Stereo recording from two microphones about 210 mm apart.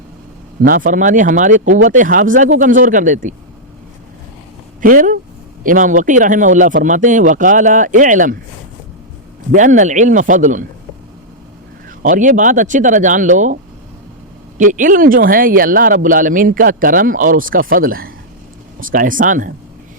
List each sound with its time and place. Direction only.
0.6 s speech: 40° right (ahead or behind)
4.8 s speech: 40° right (ahead or behind)
9.5 s speech: 40° right (ahead or behind)
12.0 s speech: 40° right (ahead or behind)
14.6 s speech: 40° right (ahead or behind)